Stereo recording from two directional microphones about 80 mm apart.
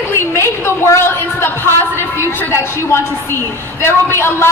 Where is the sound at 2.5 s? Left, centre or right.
Left.